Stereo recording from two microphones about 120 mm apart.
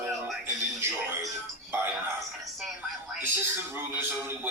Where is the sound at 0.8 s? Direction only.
20° right (ahead or behind).